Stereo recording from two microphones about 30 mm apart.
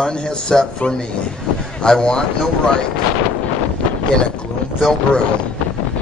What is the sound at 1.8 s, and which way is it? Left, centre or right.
Speech, left.